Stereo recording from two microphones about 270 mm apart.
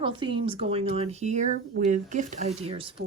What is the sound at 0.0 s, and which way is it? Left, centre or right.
A woman's voice, centre.